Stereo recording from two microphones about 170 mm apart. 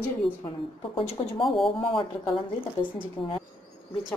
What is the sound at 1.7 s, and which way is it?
Speech, 30° left (ahead or behind).